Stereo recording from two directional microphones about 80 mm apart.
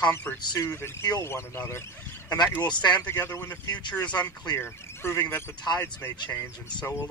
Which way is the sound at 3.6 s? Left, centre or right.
Left.